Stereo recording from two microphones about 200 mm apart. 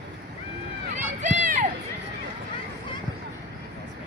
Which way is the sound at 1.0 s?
35° right (ahead or behind).